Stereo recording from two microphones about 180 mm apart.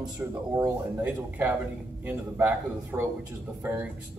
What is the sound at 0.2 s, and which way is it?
Speech, 15° right (ahead or behind).